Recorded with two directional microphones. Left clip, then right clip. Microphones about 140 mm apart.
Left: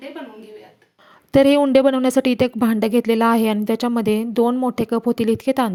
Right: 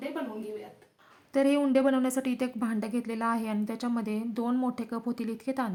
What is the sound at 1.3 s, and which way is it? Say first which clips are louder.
A woman's voice: left 12 dB; 70° left (ahead or behind).